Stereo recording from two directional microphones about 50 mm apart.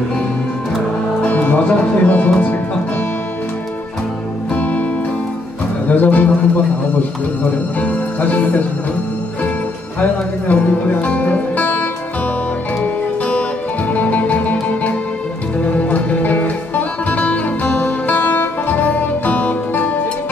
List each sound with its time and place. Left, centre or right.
1.2 s music: left
4.6 s music: left
5.9 s speech: left
7.8 s speech: left
10.5 s speech: left
12.8 s music: left